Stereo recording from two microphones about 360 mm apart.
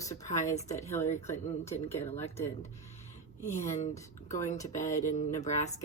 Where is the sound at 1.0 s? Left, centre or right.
Centre.